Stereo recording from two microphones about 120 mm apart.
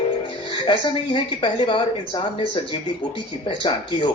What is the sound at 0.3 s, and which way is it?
Speech, 45° left (ahead or behind).